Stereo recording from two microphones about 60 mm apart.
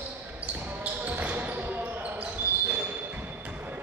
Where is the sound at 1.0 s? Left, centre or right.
Right.